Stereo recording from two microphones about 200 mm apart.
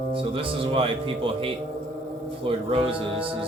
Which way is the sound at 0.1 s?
25° right (ahead or behind).